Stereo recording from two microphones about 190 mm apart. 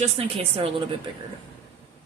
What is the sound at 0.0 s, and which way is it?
Speech, 30° right (ahead or behind).